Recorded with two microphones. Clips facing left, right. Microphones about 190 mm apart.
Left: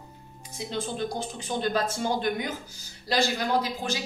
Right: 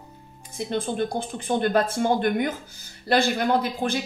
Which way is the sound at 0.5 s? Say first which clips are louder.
Right 6 dB; 55° right (ahead or behind).